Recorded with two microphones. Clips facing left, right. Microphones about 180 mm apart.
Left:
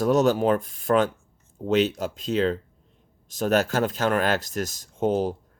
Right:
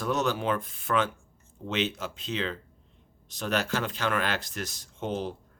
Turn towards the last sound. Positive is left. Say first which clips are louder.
# left 9 dB
turn(degrees=40)  # may be behind; listen again after turning